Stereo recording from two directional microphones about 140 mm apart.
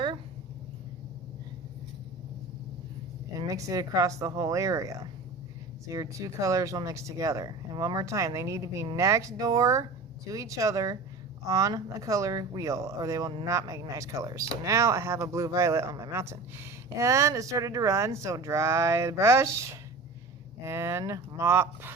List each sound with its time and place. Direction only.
3.3 s speech: 25° right (ahead or behind)